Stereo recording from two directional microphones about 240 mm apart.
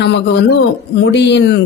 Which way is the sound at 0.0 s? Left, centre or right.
Left.